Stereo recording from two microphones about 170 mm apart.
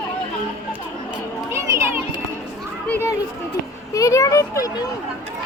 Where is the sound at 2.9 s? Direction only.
15° left (ahead or behind).